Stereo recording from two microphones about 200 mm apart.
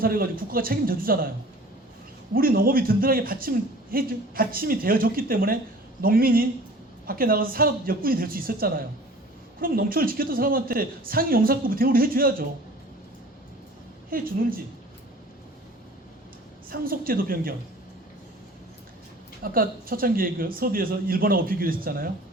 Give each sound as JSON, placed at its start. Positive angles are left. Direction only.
{"t": 0.0, "sound": "speech", "side_deg": -45}
{"t": 2.3, "sound": "speech", "side_deg": -45}
{"t": 14.1, "sound": "speech", "side_deg": -45}
{"t": 16.6, "sound": "speech", "side_deg": -45}
{"t": 19.4, "sound": "speech", "side_deg": -45}